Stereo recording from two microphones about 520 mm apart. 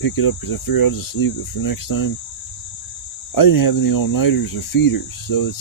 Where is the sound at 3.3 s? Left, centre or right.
Left.